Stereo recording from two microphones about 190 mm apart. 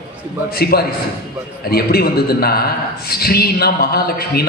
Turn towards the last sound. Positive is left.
turn(degrees=55)  # may be behind; listen again after turning